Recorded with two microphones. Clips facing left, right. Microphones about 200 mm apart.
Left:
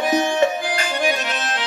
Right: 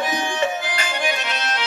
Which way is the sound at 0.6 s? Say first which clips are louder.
Left 3 dB; 45° left (ahead or behind).